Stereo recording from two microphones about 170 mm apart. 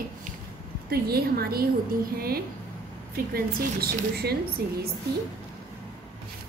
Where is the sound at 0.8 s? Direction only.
65° right (ahead or behind).